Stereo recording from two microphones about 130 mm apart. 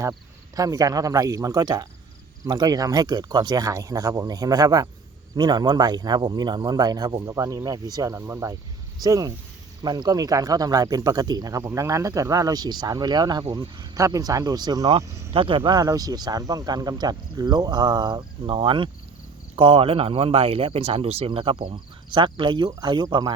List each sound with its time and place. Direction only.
0.0 s speech: 25° right (ahead or behind)
15.3 s speech: 45° right (ahead or behind)